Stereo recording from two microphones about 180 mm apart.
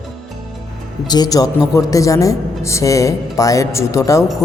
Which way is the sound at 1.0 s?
20° left (ahead or behind).